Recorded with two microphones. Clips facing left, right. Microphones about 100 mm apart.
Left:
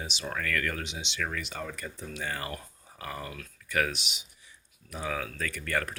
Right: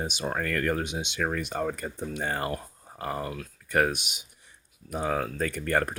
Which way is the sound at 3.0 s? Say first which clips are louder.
Right 6 dB; 40° right (ahead or behind).